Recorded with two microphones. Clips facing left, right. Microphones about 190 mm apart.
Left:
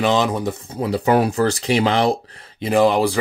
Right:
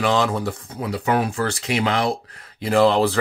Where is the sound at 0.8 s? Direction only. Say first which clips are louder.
Left 5 dB; 35° left (ahead or behind).